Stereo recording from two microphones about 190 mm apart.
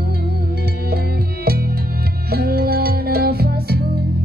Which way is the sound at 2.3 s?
55° right (ahead or behind).